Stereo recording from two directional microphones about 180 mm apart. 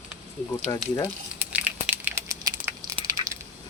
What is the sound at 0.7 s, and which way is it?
Speech, 20° left (ahead or behind).